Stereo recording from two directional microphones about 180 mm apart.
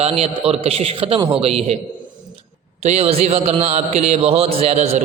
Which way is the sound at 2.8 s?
35° right (ahead or behind).